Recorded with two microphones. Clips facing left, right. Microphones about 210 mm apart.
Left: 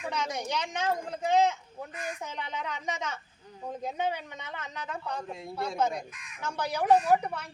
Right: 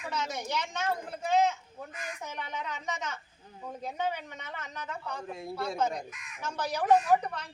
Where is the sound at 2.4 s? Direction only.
15° left (ahead or behind).